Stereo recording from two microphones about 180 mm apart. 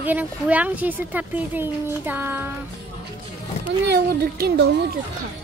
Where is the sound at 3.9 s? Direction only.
60° right (ahead or behind).